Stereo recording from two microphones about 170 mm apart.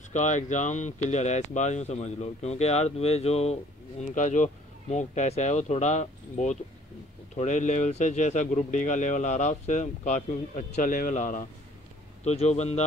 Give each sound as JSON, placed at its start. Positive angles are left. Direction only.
{"t": 0.1, "sound": "a man's voice", "side_deg": 45}